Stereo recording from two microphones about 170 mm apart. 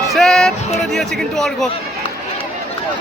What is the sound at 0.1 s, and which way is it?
Music, centre (ahead or behind).